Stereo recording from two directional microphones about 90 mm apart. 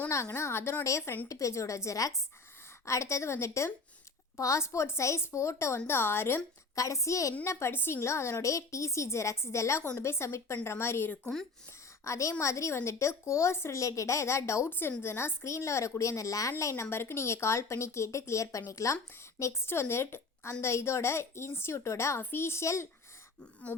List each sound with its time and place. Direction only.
0.1 s a woman's voice: 35° left (ahead or behind)
11.2 s throat clearing: 5° left (ahead or behind)
12.0 s a woman's voice: 35° left (ahead or behind)
23.4 s throat clearing: 15° left (ahead or behind)